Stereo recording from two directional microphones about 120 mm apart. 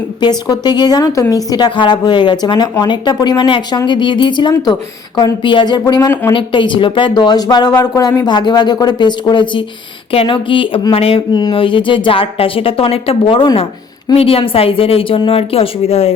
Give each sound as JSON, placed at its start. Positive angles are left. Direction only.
{"t": 0.2, "sound": "speech", "side_deg": 35}
{"t": 6.3, "sound": "a woman's voice", "side_deg": 45}
{"t": 11.3, "sound": "a woman's voice", "side_deg": 40}